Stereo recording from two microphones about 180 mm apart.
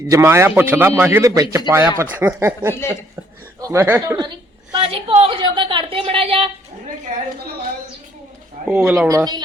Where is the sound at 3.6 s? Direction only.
15° right (ahead or behind).